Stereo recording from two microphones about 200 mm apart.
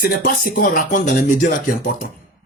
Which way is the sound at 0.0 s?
45° left (ahead or behind).